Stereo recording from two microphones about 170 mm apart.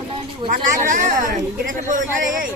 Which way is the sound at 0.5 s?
50° right (ahead or behind).